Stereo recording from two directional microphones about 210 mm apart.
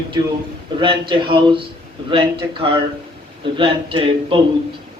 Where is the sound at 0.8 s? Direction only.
25° right (ahead or behind).